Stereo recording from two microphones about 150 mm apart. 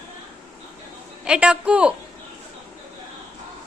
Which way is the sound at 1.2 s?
5° right (ahead or behind).